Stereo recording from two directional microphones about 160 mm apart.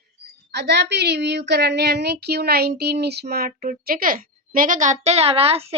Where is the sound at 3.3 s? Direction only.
70° right (ahead or behind); by 5.8 s 40° right (ahead or behind).